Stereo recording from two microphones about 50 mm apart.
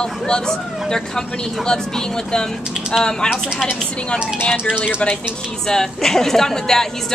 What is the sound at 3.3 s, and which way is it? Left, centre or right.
Speech, centre.